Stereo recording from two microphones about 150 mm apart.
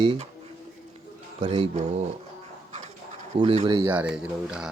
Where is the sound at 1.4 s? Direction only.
40° right (ahead or behind).